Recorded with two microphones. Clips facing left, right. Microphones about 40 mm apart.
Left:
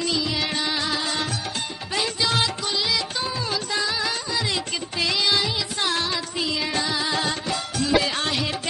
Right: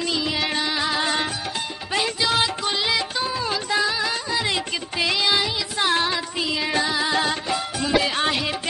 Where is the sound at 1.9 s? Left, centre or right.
Centre.